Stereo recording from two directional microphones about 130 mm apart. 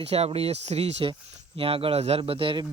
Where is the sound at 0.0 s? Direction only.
50° right (ahead or behind).